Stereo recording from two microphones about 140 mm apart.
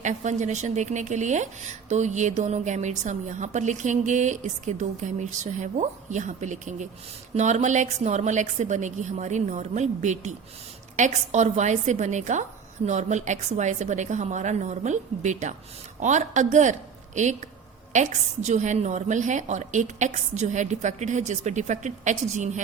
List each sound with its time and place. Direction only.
0.0 s a woman's voice: 60° right (ahead or behind)